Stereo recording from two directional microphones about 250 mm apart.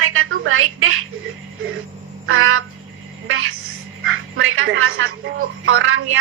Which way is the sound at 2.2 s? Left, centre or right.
Right.